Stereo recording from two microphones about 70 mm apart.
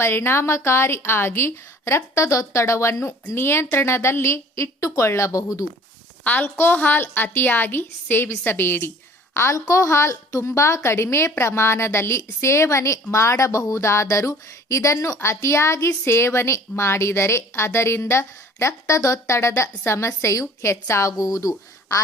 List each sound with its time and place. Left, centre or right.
0.0 s a woman's voice: left
6.2 s a woman's voice: left
9.3 s a woman's voice: left